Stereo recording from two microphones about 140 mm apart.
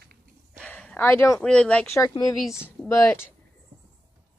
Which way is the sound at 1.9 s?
25° left (ahead or behind).